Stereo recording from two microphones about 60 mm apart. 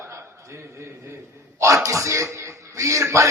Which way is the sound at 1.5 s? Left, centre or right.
Right.